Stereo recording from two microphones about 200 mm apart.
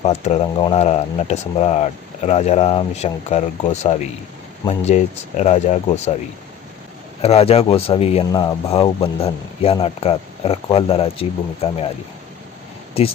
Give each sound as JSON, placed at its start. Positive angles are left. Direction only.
{"t": 0.0, "sound": "speech", "side_deg": 35}
{"t": 7.2, "sound": "speech", "side_deg": 30}
{"t": 12.9, "sound": "speech", "side_deg": 30}